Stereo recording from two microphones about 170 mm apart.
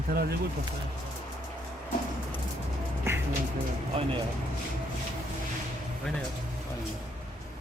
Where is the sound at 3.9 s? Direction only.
30° right (ahead or behind).